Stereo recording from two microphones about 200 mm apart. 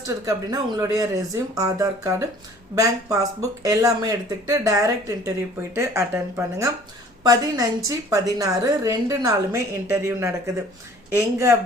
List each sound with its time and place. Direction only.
0.0 s a woman's voice: 15° right (ahead or behind)